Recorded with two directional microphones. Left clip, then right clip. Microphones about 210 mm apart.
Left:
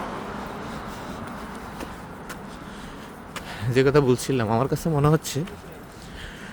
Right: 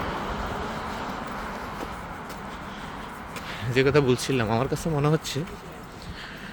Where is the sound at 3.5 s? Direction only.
25° left (ahead or behind).